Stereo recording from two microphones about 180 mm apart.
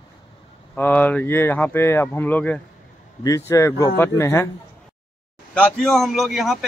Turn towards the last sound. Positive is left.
turn(degrees=0)  # may be behind; listen again after turning